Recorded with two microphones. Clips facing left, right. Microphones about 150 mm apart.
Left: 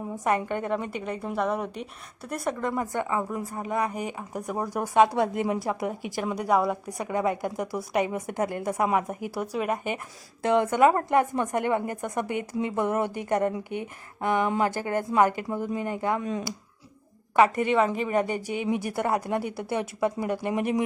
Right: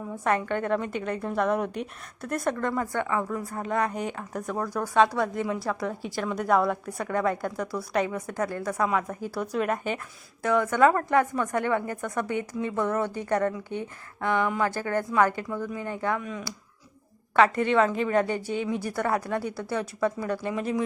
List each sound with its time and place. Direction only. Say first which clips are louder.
0.3 s a woman's voice: right 1 dB; 10° left (ahead or behind)
10.4 s a woman's voice: left 1 dB; 20° left (ahead or behind)
17.3 s a woman's voice: even; 15° left (ahead or behind)